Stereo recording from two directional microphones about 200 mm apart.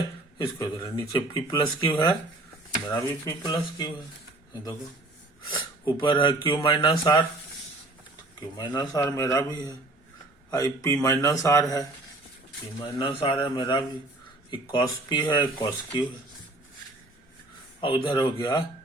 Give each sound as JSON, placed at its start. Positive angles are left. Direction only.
{"t": 0.4, "sound": "speech", "side_deg": 20}
{"t": 5.8, "sound": "speech", "side_deg": 25}
{"t": 8.4, "sound": "speech", "side_deg": 20}
{"t": 12.9, "sound": "speech", "side_deg": 15}
{"t": 17.7, "sound": "speech", "side_deg": 25}